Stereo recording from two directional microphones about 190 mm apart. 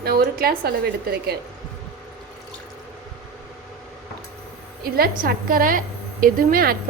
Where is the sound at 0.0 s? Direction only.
55° right (ahead or behind).